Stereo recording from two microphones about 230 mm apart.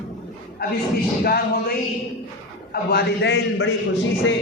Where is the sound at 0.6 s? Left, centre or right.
Left.